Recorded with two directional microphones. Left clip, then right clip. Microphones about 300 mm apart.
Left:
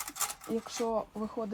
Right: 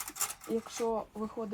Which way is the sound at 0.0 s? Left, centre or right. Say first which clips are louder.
Left 2 dB; left.